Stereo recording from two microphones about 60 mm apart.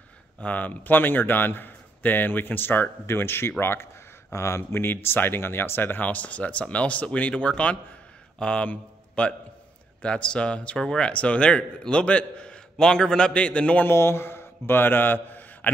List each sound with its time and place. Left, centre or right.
0.4 s a man's voice: left
4.3 s a man's voice: left; by 13.8 s centre
13.8 s a man's voice: left